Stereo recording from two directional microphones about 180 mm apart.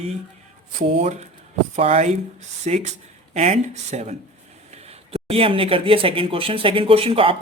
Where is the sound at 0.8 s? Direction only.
35° right (ahead or behind).